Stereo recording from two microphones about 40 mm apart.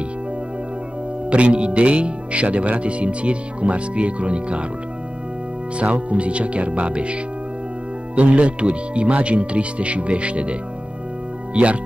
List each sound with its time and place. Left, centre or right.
1.3 s speech: right
5.8 s speech: right
8.2 s speech: right
11.5 s speech: right